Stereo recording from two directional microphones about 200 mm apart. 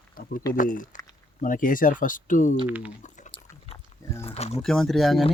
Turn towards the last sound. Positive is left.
turn(degrees=0)  # may be behind; listen again after turning